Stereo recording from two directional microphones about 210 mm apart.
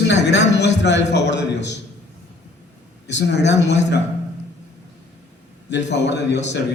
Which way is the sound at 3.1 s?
55° left (ahead or behind).